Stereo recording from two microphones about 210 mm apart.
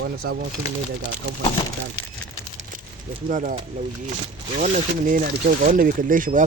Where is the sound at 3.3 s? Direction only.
35° right (ahead or behind).